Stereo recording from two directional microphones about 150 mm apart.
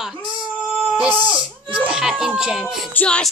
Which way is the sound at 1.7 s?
5° right (ahead or behind).